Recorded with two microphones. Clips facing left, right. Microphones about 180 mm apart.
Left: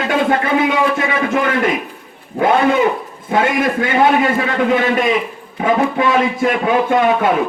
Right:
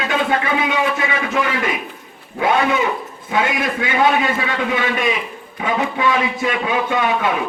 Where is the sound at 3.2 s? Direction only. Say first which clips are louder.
Left 4 dB; 50° left (ahead or behind).